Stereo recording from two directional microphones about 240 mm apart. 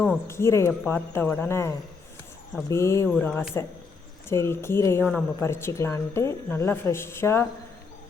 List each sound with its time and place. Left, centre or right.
0.0 s a woman's voice: centre